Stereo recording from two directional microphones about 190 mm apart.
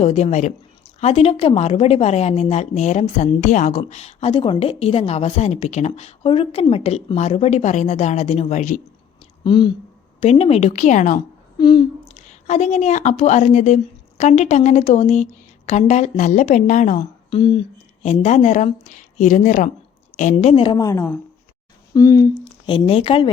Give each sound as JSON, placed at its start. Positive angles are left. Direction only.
{"t": 0.0, "sound": "a woman's voice", "side_deg": 35}
{"t": 9.4, "sound": "a woman's voice", "side_deg": 25}
{"t": 11.5, "sound": "a sound", "side_deg": 25}
{"t": 12.1, "sound": "a woman's voice", "side_deg": 35}
{"t": 17.3, "sound": "a woman's voice", "side_deg": 25}
{"t": 20.3, "sound": "a woman's voice", "side_deg": 30}
{"t": 22.6, "sound": "a woman's voice", "side_deg": 30}